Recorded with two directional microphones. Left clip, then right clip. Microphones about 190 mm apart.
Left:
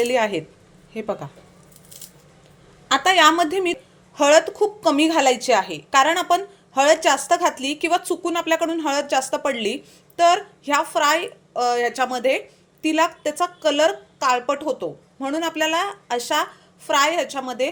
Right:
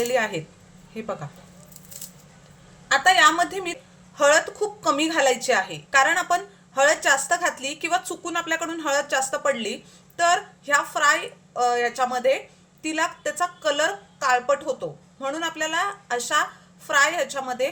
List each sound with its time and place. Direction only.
0.0 s a woman's voice: 25° left (ahead or behind)
2.9 s a woman's voice: 30° left (ahead or behind)